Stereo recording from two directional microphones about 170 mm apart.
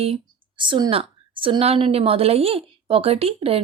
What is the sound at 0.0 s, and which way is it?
A woman's voice, 30° right (ahead or behind).